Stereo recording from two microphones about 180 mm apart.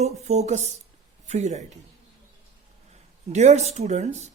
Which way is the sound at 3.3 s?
40° right (ahead or behind).